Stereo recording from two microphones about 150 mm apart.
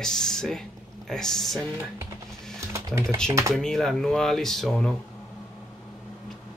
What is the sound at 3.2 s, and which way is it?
Speech, 20° right (ahead or behind).